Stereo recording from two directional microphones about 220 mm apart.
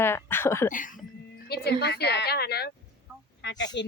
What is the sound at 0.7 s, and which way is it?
Speech, 35° left (ahead or behind).